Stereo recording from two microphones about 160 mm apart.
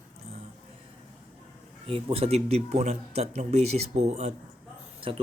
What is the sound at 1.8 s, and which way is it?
Speech, 35° right (ahead or behind).